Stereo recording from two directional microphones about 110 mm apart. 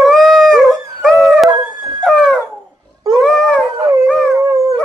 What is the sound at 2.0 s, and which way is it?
Dog, 5° left (ahead or behind).